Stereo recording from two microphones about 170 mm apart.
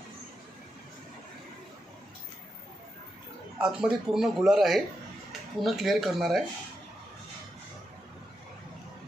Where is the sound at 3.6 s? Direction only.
5° right (ahead or behind).